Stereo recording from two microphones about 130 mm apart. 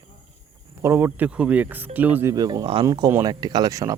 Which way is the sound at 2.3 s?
30° right (ahead or behind).